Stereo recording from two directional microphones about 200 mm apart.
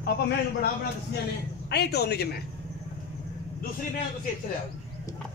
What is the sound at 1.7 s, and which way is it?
Speech, 55° left (ahead or behind).